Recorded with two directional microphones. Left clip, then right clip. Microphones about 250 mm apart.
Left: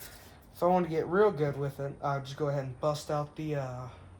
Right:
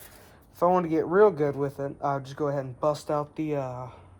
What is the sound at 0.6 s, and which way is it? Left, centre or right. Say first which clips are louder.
Speech: right 4 dB; right.